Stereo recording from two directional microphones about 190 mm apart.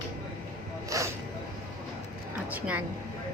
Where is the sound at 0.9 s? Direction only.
15° right (ahead or behind).